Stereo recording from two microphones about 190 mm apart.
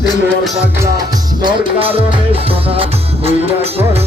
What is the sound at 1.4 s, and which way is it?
Music, 25° right (ahead or behind).